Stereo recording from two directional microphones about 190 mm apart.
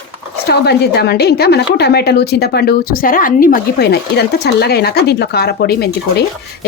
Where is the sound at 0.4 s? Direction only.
60° left (ahead or behind).